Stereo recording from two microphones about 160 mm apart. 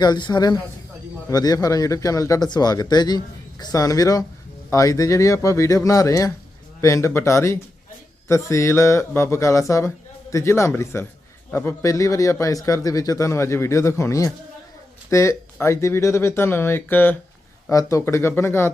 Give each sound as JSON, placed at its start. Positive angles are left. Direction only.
{"t": 0.0, "sound": "a man's voice", "side_deg": 25}